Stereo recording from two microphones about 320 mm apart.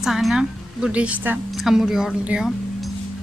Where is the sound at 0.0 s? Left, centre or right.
Centre.